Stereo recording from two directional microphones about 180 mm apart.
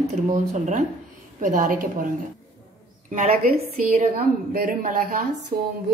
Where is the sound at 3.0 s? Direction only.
45° right (ahead or behind).